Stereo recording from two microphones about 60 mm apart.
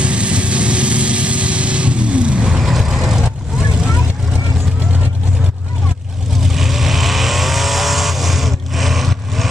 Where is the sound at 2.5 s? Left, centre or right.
Centre.